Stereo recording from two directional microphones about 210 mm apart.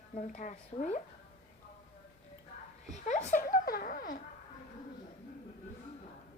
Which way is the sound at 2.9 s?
35° left (ahead or behind).